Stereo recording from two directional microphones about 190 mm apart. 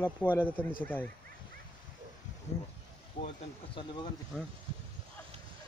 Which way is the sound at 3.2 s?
55° left (ahead or behind).